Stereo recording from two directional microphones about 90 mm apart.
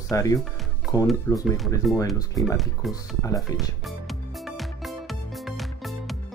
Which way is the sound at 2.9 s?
40° left (ahead or behind).